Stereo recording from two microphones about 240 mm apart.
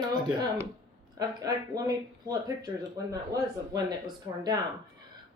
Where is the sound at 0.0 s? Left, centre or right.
Centre.